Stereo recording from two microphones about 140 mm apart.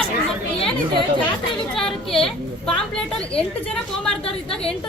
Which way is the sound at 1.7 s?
5° left (ahead or behind).